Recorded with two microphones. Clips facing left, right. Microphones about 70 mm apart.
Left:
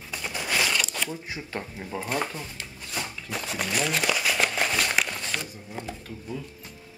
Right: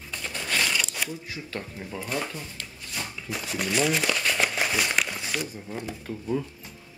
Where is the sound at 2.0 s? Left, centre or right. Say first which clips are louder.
Left 2 dB; left.